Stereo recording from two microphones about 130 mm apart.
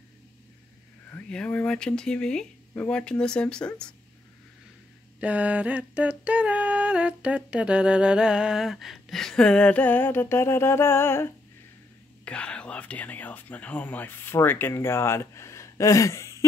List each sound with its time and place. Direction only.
1.1 s speech: 10° left (ahead or behind)
5.2 s music: 10° right (ahead or behind); by 11.3 s 20° left (ahead or behind)
12.3 s speech: 10° left (ahead or behind)